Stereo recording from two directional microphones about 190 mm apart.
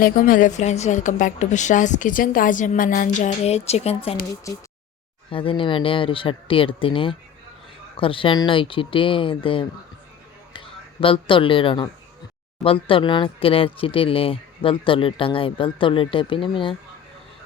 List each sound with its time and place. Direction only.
0.0 s a woman's voice: 45° left (ahead or behind)
4.5 s a sound: 15° left (ahead or behind)
5.3 s a man's voice: 25° left (ahead or behind)